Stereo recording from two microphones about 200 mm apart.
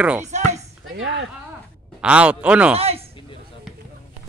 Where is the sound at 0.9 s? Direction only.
70° right (ahead or behind).